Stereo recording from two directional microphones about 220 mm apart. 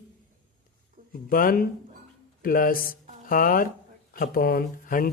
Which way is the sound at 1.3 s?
40° left (ahead or behind).